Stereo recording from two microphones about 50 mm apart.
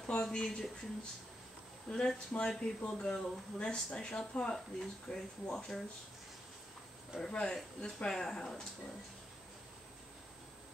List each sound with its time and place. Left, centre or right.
0.0 s speech: centre
1.9 s speech: centre
7.2 s speech: centre